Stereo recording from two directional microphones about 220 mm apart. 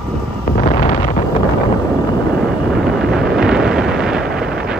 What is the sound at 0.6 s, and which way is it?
Wind noise, 30° left (ahead or behind).